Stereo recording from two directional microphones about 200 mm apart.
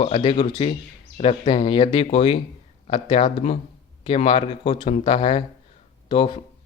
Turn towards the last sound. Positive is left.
turn(degrees=25)  # may be behind; listen again after turning